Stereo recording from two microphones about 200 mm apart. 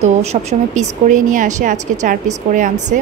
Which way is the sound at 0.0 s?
35° right (ahead or behind).